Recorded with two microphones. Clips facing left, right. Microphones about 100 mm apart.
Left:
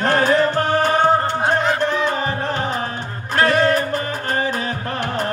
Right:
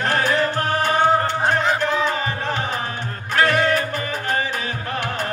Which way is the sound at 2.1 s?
35° left (ahead or behind).